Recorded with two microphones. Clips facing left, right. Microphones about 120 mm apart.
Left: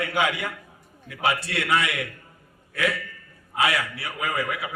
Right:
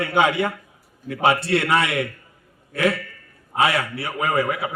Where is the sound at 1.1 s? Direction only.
55° right (ahead or behind).